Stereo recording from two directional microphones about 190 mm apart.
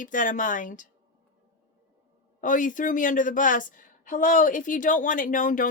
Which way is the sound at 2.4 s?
45° left (ahead or behind).